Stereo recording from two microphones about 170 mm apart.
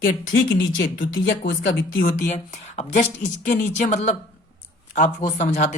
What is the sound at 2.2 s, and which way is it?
Speech, 45° left (ahead or behind).